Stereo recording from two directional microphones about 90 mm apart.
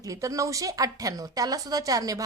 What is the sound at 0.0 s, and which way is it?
A woman's voice, 40° right (ahead or behind).